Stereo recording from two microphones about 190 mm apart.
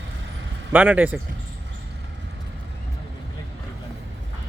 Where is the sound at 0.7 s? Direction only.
10° right (ahead or behind).